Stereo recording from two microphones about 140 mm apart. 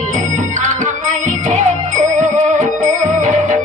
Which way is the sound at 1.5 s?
60° right (ahead or behind).